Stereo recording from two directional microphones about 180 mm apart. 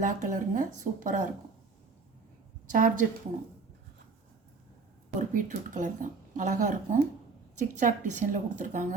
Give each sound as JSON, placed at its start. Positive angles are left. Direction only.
{"t": 0.0, "sound": "speech", "side_deg": -45}
{"t": 2.7, "sound": "speech", "side_deg": -45}
{"t": 5.3, "sound": "speech", "side_deg": -45}